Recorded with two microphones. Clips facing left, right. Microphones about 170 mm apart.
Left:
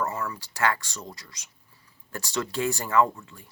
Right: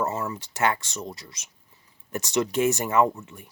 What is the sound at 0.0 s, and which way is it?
Speech, 20° right (ahead or behind).